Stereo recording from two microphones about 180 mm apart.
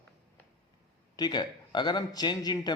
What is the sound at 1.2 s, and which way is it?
A man's voice, 25° left (ahead or behind).